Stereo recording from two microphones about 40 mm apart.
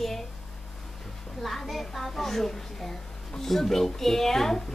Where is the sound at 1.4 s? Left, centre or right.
Centre.